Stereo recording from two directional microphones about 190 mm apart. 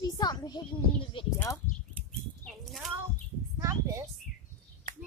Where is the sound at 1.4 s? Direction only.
15° left (ahead or behind).